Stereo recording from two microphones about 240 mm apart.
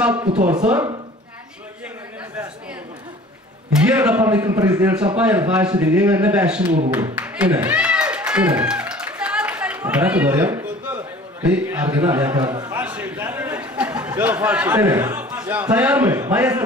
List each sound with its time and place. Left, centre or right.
0.1 s speech: right
3.9 s a man's voice: centre
6.9 s a sound: centre
11.5 s a man's voice: centre